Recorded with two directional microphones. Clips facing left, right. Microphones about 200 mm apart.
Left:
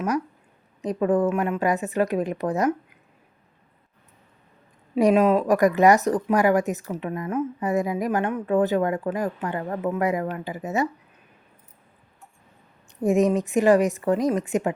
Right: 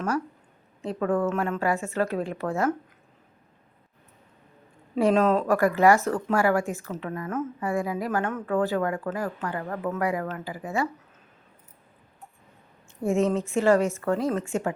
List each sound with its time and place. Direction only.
0.8 s a woman's voice: 15° left (ahead or behind)
4.9 s speech: 15° left (ahead or behind)
13.0 s a woman's voice: 15° left (ahead or behind)